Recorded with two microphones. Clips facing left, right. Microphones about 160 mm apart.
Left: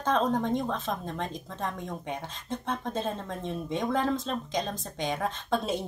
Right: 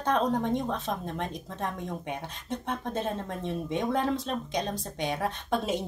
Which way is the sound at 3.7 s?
15° right (ahead or behind).